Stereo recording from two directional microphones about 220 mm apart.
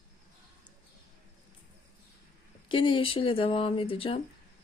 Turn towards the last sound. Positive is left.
turn(degrees=25)  # may be behind; listen again after turning